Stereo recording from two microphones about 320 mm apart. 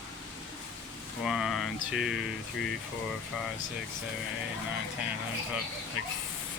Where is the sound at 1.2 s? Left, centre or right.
Centre.